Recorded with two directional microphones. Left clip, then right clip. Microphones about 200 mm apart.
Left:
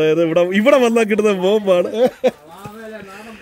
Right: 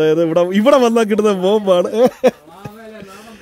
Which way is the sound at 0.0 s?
30° right (ahead or behind).